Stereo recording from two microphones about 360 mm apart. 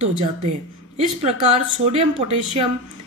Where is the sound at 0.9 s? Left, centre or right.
Centre.